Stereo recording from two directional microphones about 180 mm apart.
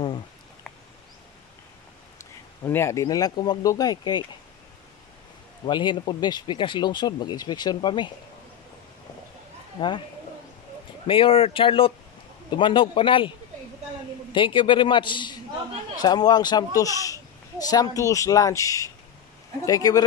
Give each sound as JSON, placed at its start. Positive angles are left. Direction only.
{"t": 2.6, "sound": "a child's voice", "side_deg": 15}
{"t": 5.7, "sound": "a child's voice", "side_deg": 25}
{"t": 9.8, "sound": "a child's voice", "side_deg": 25}
{"t": 11.1, "sound": "a child's voice", "side_deg": 30}
{"t": 14.3, "sound": "a child's voice", "side_deg": 25}